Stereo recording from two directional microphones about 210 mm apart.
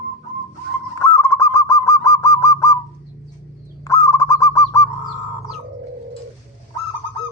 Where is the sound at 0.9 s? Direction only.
15° left (ahead or behind).